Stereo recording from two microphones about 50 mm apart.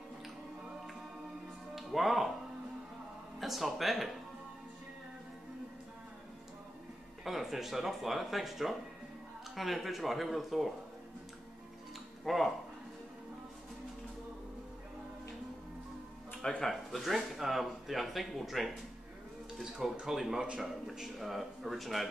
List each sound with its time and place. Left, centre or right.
1.8 s speech: centre
3.3 s speech: centre
7.2 s speech: centre
12.3 s speech: centre
16.4 s speech: centre
20.3 s a man's voice: centre
20.6 s speech: centre